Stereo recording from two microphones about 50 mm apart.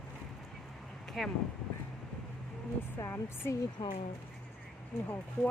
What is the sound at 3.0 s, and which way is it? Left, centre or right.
Speech, left.